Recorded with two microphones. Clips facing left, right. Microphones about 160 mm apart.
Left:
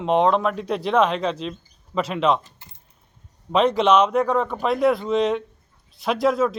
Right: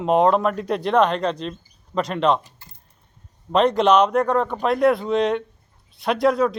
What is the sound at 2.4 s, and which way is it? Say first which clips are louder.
Typing: even; 20° left (ahead or behind).